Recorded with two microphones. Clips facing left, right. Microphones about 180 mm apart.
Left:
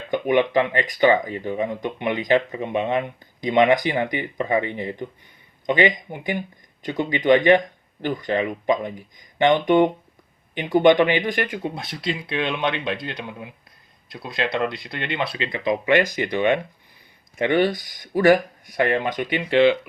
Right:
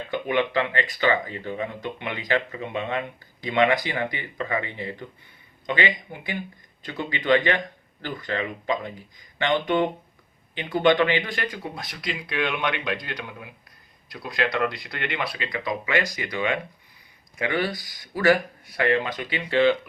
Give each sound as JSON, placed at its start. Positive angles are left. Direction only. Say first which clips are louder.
{"t": 0.1, "sound": "speech", "louder": "left 6 dB", "side_deg": 15}